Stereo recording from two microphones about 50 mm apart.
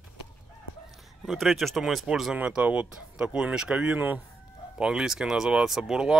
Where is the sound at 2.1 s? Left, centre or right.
Centre.